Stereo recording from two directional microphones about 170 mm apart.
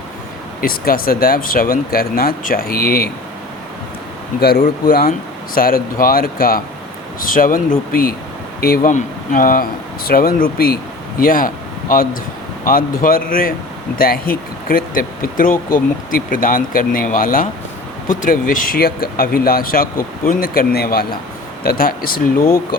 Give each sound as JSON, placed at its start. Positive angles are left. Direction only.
{"t": 0.6, "sound": "speech", "side_deg": 60}
{"t": 4.4, "sound": "speech", "side_deg": 70}